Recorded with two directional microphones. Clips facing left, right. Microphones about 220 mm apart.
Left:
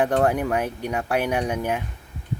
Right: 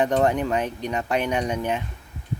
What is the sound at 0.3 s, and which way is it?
Speech, 10° left (ahead or behind).